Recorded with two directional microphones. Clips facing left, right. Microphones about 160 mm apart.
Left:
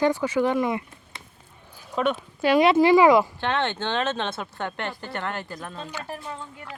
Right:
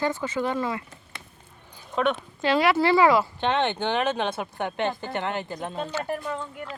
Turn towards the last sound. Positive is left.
turn(degrees=-50)  # may be behind; listen again after turning